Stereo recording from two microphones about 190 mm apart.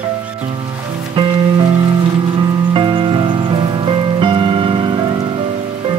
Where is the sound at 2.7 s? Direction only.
25° right (ahead or behind).